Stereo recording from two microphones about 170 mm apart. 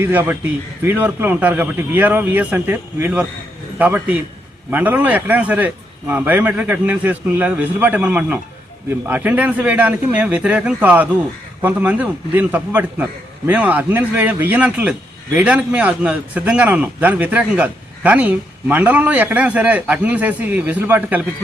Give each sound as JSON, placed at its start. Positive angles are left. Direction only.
{"t": 0.0, "sound": "a man's voice", "side_deg": -10}